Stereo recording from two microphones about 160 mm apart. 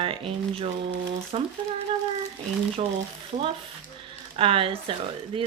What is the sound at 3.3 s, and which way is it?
Frying, 50° right (ahead or behind).